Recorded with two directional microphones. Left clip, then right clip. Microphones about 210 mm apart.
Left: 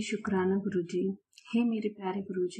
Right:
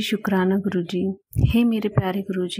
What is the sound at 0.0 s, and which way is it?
Speech, 40° right (ahead or behind).